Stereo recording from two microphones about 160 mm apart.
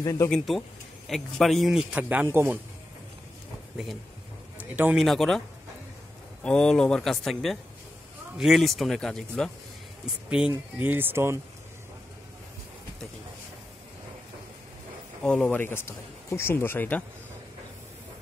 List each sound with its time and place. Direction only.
0.0 s speech: 20° left (ahead or behind)
0.3 s a man's voice: centre (ahead or behind); by 2.6 s 15° right (ahead or behind)
4.6 s speech: 10° right (ahead or behind)
5.0 s a man's voice: centre (ahead or behind)
6.4 s a man's voice: 5° left (ahead or behind)
10.5 s speech: 10° right (ahead or behind)
15.2 s speech: 5° left (ahead or behind)